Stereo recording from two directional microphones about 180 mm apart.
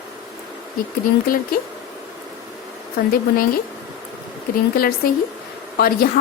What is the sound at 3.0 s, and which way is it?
Speech, 55° left (ahead or behind).